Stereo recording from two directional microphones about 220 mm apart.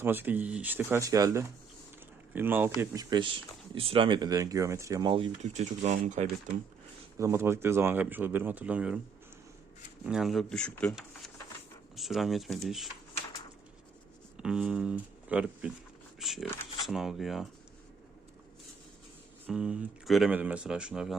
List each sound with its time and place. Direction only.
0.0 s speech: 10° right (ahead or behind); by 6.2 s 35° right (ahead or behind)
7.2 s speech: 10° right (ahead or behind)
10.1 s speech: centre (ahead or behind)
14.4 s speech: 5° right (ahead or behind)
19.5 s speech: 5° right (ahead or behind)